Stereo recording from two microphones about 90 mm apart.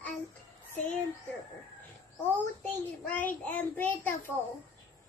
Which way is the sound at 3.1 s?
20° left (ahead or behind).